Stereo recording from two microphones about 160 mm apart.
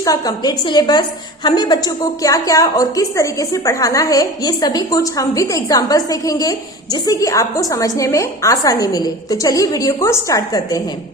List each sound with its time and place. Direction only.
0.0 s a woman's voice: 20° left (ahead or behind)